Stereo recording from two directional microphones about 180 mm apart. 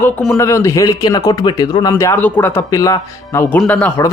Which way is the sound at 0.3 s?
15° left (ahead or behind).